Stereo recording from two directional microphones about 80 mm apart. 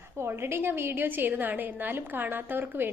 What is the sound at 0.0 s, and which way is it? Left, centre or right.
A woman's voice, right.